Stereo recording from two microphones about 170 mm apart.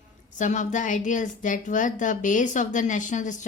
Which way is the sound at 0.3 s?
45° left (ahead or behind).